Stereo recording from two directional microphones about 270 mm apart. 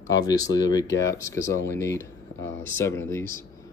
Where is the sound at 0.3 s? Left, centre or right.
Centre.